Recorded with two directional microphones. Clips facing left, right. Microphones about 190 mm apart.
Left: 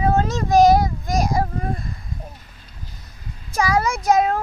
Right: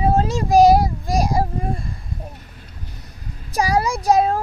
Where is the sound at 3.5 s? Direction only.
35° right (ahead or behind).